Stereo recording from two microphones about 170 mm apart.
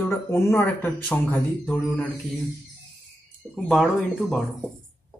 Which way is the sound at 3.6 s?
Centre (ahead or behind).